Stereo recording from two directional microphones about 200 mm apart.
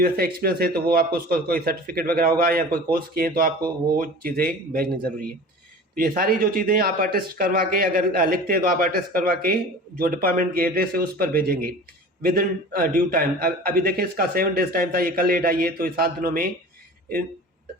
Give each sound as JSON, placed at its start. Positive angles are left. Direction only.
{"t": 0.0, "sound": "a man's voice", "side_deg": -50}
{"t": 5.9, "sound": "a man's voice", "side_deg": -45}